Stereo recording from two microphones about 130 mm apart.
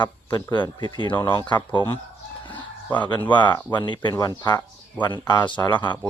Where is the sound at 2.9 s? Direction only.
15° left (ahead or behind).